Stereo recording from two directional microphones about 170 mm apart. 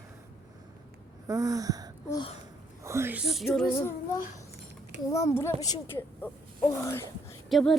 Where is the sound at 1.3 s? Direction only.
20° right (ahead or behind); by 3.7 s centre (ahead or behind).